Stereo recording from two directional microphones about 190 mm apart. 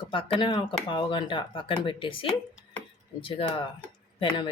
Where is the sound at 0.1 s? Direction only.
25° left (ahead or behind).